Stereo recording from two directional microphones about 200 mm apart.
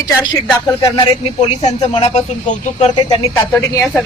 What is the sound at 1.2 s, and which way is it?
Speech, 25° left (ahead or behind).